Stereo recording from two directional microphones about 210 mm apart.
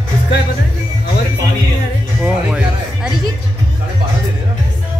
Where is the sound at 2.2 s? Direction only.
5° right (ahead or behind).